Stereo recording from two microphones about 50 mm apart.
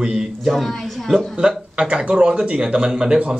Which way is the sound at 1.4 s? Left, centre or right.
Centre.